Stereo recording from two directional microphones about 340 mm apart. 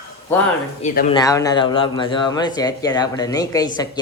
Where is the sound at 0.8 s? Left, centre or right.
Left.